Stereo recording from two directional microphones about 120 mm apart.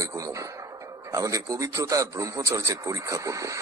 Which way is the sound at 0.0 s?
25° right (ahead or behind).